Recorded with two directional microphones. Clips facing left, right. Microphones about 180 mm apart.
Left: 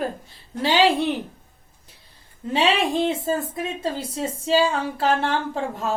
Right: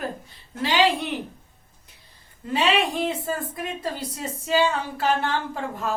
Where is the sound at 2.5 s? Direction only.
25° left (ahead or behind).